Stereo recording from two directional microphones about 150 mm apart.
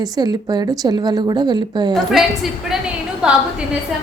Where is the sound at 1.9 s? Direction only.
Centre (ahead or behind).